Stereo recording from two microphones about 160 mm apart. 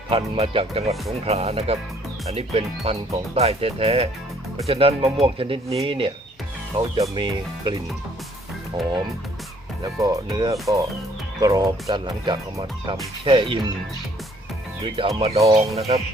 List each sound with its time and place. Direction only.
0.1 s speech: 35° right (ahead or behind)
10.0 s speech: 20° right (ahead or behind)
14.8 s speech: 35° right (ahead or behind)